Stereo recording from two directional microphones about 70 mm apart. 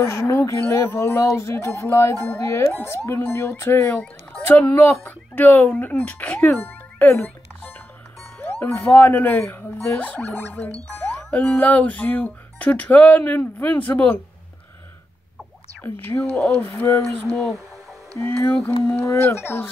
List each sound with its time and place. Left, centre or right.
0.1 s speech: left
11.2 s speech: centre
15.8 s speech: left
18.2 s speech: left